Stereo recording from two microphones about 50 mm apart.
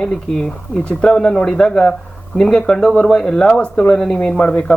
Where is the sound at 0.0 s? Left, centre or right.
Centre.